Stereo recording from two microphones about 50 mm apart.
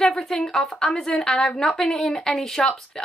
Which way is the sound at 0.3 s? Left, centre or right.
Centre.